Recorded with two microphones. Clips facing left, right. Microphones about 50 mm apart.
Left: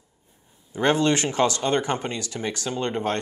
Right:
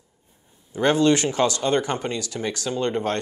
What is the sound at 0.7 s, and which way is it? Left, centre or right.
Speech, left.